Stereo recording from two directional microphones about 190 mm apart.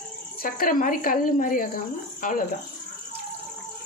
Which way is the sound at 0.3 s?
50° left (ahead or behind).